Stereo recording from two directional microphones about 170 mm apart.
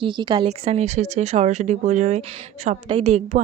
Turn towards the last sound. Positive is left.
turn(degrees=-40)  # may be behind; listen again after turning